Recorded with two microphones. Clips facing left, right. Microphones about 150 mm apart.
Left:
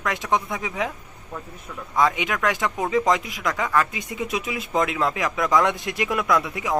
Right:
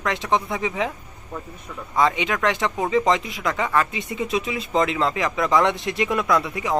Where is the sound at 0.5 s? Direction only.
Centre (ahead or behind).